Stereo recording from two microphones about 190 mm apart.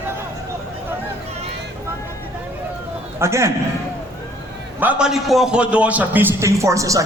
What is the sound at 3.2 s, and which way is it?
Speech, 15° right (ahead or behind).